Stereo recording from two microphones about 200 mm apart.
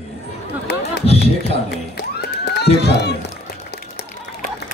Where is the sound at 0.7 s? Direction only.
55° left (ahead or behind).